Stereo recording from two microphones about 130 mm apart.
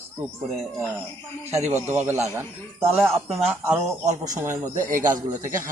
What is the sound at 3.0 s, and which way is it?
Speech, centre (ahead or behind).